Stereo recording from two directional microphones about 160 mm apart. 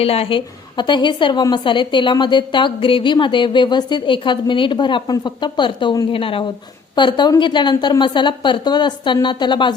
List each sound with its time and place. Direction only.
0.0 s a woman's voice: 35° left (ahead or behind)